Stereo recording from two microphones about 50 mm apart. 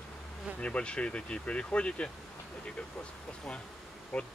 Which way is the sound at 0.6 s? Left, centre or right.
Left.